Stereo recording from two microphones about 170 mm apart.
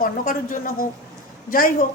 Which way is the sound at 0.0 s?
55° left (ahead or behind).